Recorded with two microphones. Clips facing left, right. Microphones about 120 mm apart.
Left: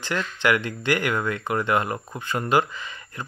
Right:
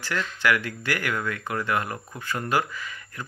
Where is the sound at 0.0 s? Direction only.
20° left (ahead or behind).